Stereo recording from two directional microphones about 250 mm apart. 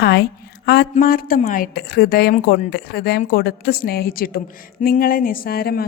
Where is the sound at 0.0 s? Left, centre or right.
Left.